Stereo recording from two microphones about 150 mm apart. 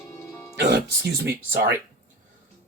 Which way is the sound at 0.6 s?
90° right.